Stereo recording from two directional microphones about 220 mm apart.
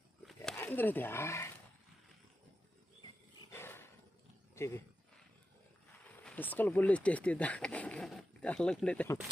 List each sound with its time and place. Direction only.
0.3 s a sound: 5° left (ahead or behind)
3.5 s dog: 10° left (ahead or behind)
4.5 s speech: 10° left (ahead or behind)
6.2 s speech: 5° left (ahead or behind)